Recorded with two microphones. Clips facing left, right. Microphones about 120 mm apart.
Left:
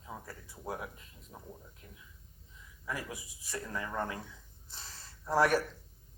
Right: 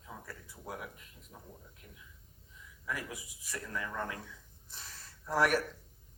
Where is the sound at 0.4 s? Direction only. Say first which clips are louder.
Left 4 dB; 30° left (ahead or behind).